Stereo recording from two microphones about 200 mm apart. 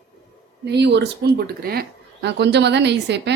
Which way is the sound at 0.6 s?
55° right (ahead or behind).